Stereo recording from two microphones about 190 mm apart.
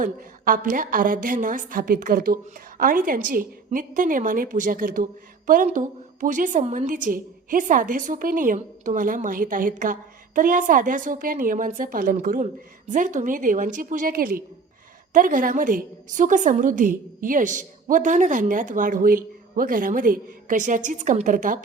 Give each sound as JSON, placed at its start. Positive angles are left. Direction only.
{"t": 0.0, "sound": "a woman's voice", "side_deg": -45}